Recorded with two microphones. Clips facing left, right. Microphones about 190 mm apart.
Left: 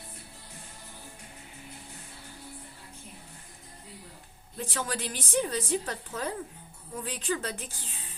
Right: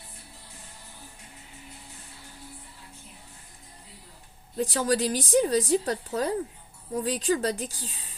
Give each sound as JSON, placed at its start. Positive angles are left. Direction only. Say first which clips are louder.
{"t": 4.5, "sound": "a woman's voice", "louder": "right 9 dB", "side_deg": -35}